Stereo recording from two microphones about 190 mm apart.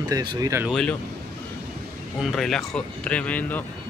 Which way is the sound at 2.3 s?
Centre (ahead or behind).